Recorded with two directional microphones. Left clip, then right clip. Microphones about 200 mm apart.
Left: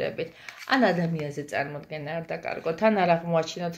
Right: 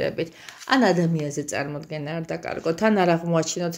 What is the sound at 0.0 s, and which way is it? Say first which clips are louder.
Speech: right 4 dB; 60° right (ahead or behind).